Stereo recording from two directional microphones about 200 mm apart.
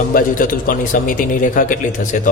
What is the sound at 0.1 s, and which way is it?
A man's voice, 45° left (ahead or behind).